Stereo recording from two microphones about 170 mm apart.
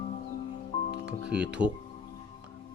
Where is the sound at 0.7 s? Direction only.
40° left (ahead or behind).